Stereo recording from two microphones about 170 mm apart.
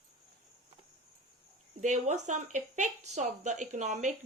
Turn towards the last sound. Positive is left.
turn(degrees=-45)  # may be behind; listen again after turning